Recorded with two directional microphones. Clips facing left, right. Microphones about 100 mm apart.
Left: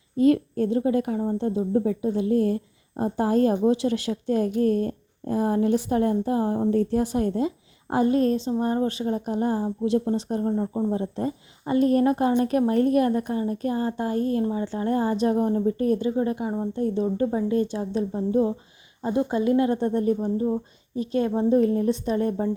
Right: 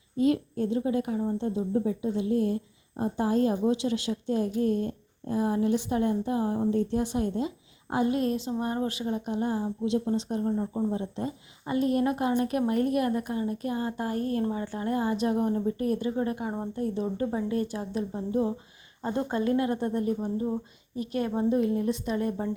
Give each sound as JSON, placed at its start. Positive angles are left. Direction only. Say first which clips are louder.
{"t": 0.2, "sound": "speech", "louder": "left 5 dB", "side_deg": 55}
{"t": 10.6, "sound": "speech", "louder": "left 3 dB", "side_deg": 25}
{"t": 10.9, "sound": "a woman's voice", "louder": "left 5 dB", "side_deg": 40}
{"t": 14.8, "sound": "a woman's voice", "louder": "left 4 dB", "side_deg": 35}
{"t": 16.0, "sound": "speech", "louder": "left 4 dB", "side_deg": 25}
{"t": 21.6, "sound": "a woman's voice", "louder": "left 5 dB", "side_deg": 40}